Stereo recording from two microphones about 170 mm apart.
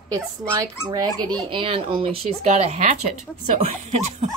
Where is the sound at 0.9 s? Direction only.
25° right (ahead or behind); by 3.6 s 45° right (ahead or behind).